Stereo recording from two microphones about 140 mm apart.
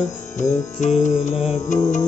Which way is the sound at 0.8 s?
55° left (ahead or behind).